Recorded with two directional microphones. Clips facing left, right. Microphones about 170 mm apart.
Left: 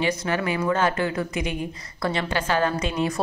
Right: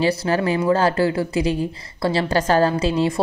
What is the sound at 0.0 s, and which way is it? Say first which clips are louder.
A woman's voice: right 5 dB; 35° right (ahead or behind).